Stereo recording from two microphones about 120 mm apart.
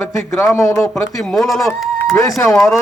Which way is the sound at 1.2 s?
Centre (ahead or behind).